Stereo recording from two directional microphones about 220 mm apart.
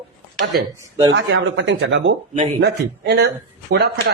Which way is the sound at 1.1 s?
55° right (ahead or behind).